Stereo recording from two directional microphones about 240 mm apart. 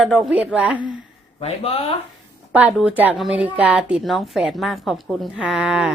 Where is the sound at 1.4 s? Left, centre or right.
Left.